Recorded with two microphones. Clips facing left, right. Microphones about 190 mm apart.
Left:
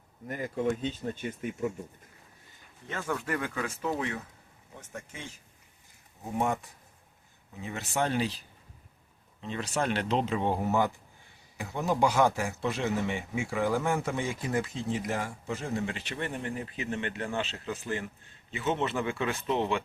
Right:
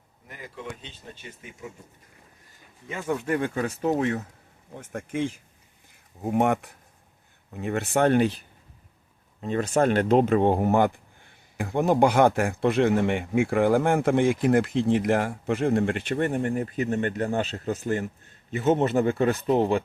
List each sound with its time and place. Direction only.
0.3 s speech: 50° left (ahead or behind)
2.9 s speech: 15° right (ahead or behind)
3.6 s speech: 45° right (ahead or behind)
6.2 s speech: 65° right (ahead or behind); by 19.8 s 40° right (ahead or behind)